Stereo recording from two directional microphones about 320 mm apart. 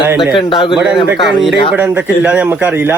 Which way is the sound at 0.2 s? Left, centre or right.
Centre.